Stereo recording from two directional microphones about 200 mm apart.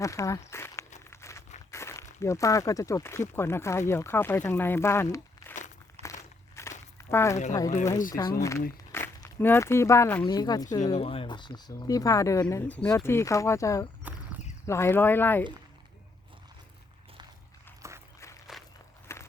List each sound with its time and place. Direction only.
0.0 s speech: 15° left (ahead or behind)
1.1 s a sound: 15° left (ahead or behind)
1.7 s speech: 15° left (ahead or behind)
6.0 s walk: 30° right (ahead or behind)
6.6 s a sound: 15° left (ahead or behind)
7.5 s speech: 15° left (ahead or behind)
10.9 s speech: 30° left (ahead or behind)
14.0 s a sound: 5° right (ahead or behind)
14.7 s speech: 10° left (ahead or behind)
17.8 s walk: 15° right (ahead or behind)
18.5 s walk: centre (ahead or behind)
19.1 s walk: 15° left (ahead or behind)